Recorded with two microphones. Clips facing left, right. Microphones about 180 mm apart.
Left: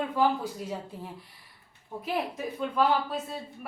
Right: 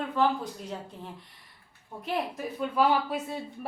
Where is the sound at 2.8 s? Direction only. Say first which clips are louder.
Right 1 dB; 10° right (ahead or behind).